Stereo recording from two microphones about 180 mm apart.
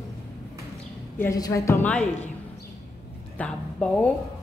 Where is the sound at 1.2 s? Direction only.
15° left (ahead or behind).